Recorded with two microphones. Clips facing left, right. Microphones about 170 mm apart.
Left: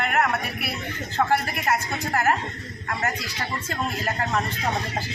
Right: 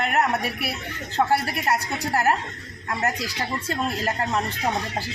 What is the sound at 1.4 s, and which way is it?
Speech, 35° right (ahead or behind).